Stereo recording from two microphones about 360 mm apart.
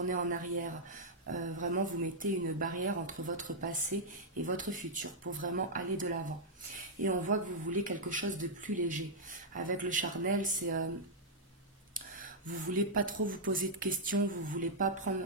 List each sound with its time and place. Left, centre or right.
0.1 s speech: right
11.9 s speech: right